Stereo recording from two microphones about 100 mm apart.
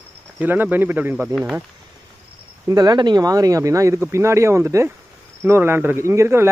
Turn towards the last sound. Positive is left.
turn(degrees=-25)  # may be behind; listen again after turning